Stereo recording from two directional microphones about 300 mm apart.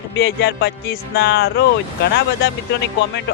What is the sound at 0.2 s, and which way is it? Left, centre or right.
Speech, left.